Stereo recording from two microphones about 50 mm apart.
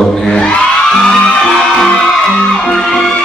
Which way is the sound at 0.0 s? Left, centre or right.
Centre.